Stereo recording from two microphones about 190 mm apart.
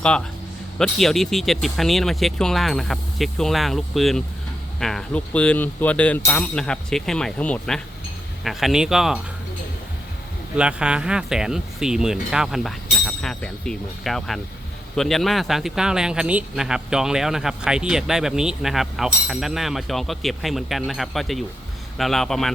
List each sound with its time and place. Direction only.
0.0 s speech: 5° left (ahead or behind)
10.6 s speech: 5° right (ahead or behind)